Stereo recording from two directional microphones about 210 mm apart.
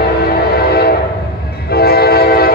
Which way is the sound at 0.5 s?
50° left (ahead or behind).